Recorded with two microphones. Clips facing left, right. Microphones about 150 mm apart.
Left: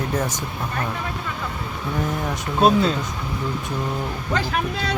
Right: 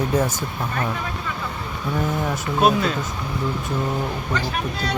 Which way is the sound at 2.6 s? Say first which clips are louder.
Left 2 dB; 30° left (ahead or behind).